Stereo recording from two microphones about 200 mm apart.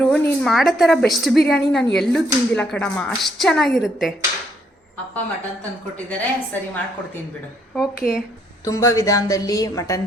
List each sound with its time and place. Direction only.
0.0 s a woman's voice: centre (ahead or behind)
6.1 s a woman's voice: 10° left (ahead or behind)
7.8 s a woman's voice: 5° right (ahead or behind)
8.6 s a woman's voice: 15° left (ahead or behind)